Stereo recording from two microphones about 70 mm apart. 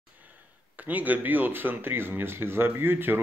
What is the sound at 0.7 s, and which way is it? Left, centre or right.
Speech, right.